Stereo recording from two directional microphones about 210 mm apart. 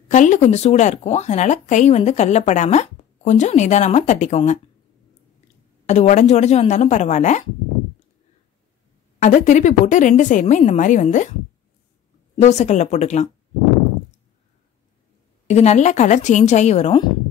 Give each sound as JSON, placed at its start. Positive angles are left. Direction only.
{"t": 0.1, "sound": "speech", "side_deg": 35}
{"t": 5.9, "sound": "speech", "side_deg": 35}
{"t": 9.2, "sound": "speech", "side_deg": 35}
{"t": 12.4, "sound": "speech", "side_deg": 30}
{"t": 15.4, "sound": "speech", "side_deg": 30}